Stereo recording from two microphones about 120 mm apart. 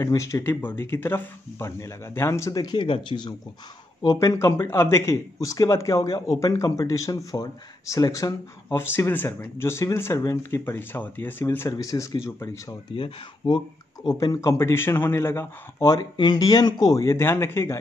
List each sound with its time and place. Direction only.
0.0 s speech: 25° left (ahead or behind); by 3.3 s 40° left (ahead or behind)
4.0 s speech: 30° left (ahead or behind)
12.9 s speech: 45° left (ahead or behind)
14.0 s speech: 30° left (ahead or behind)